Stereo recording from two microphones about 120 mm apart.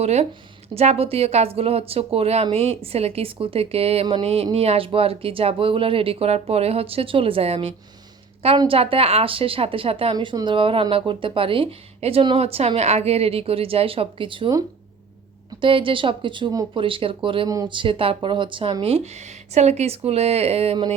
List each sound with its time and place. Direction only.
0.0 s speech: 65° right (ahead or behind)
10.2 s speech: 40° right (ahead or behind)
15.6 s speech: 45° right (ahead or behind)
16.7 s speech: 45° right (ahead or behind)
19.5 s speech: 65° right (ahead or behind)